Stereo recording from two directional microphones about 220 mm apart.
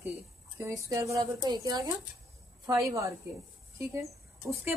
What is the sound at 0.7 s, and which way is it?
A woman's voice, 15° right (ahead or behind).